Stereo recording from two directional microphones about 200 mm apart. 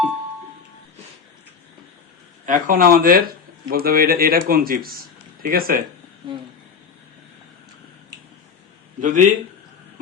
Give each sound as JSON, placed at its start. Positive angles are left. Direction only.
{"t": 2.5, "sound": "speech", "side_deg": -45}
{"t": 9.0, "sound": "a man's voice", "side_deg": -40}